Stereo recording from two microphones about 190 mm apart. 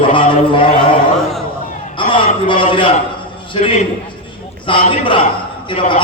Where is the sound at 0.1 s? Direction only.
25° left (ahead or behind).